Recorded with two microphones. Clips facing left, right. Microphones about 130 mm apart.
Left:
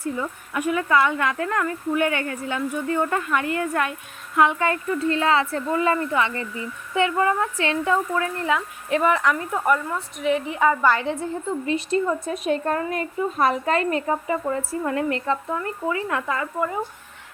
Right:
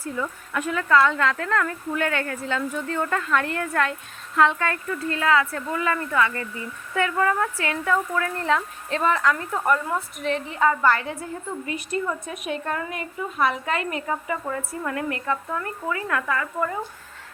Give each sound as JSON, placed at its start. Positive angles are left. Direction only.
{"t": 0.0, "sound": "speech", "side_deg": 15}
{"t": 8.4, "sound": "speech", "side_deg": 10}